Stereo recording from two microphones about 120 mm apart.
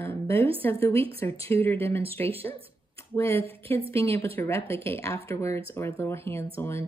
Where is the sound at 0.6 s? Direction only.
20° left (ahead or behind).